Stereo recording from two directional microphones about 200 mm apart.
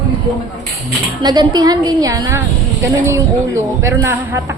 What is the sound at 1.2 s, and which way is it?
A woman's voice, 20° right (ahead or behind).